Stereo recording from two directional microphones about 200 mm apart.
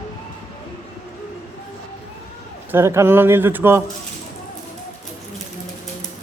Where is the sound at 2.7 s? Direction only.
15° right (ahead or behind).